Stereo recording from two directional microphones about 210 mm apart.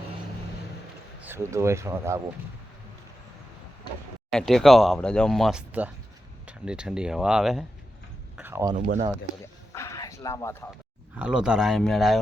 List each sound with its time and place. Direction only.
1.2 s speech: 10° right (ahead or behind)
4.3 s speech: centre (ahead or behind)
8.4 s a sound: 10° right (ahead or behind)
8.7 s speech: 40° right (ahead or behind)
9.7 s a sound: 15° left (ahead or behind)
11.2 s speech: 5° right (ahead or behind)